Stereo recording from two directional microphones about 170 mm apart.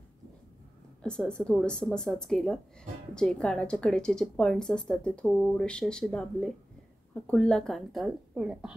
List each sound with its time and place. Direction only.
1.0 s a woman's voice: 5° left (ahead or behind)